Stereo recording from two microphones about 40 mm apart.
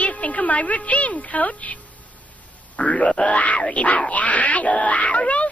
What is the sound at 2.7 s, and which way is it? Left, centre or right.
Grunt, left.